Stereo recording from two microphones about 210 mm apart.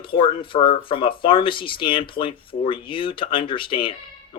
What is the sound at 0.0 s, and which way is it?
Speech, 25° left (ahead or behind).